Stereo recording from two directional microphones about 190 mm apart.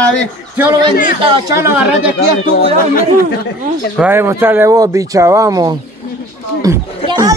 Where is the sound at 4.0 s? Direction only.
10° right (ahead or behind).